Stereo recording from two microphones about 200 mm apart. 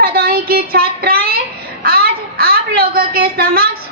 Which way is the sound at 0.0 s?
50° right (ahead or behind).